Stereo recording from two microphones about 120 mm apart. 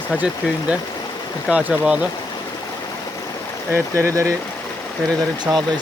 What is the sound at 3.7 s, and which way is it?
Speech, 25° right (ahead or behind).